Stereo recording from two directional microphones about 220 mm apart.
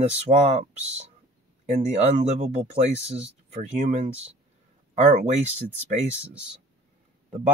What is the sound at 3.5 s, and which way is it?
Speech, 35° right (ahead or behind).